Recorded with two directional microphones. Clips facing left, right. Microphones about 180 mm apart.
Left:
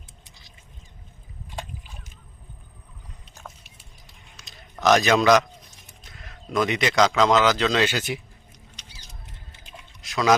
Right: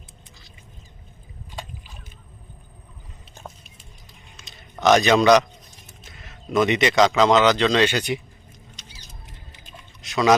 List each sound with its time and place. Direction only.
4.4 s a sound: centre (ahead or behind)
6.0 s speech: centre (ahead or behind)
9.2 s rodents: 20° right (ahead or behind)
10.0 s pour: centre (ahead or behind)